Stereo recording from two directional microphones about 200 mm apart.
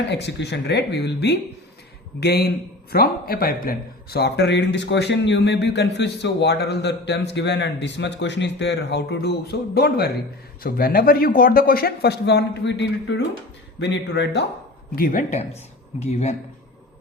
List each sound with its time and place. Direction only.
0.1 s speech: 60° left (ahead or behind)
14.9 s speech: 45° left (ahead or behind)